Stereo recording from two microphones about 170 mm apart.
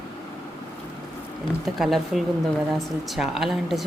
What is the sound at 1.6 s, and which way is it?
Speech, centre (ahead or behind).